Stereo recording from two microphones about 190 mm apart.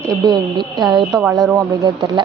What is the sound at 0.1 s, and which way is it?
A woman's voice, 20° right (ahead or behind).